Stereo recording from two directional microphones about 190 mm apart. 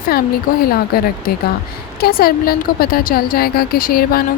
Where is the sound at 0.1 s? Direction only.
55° left (ahead or behind).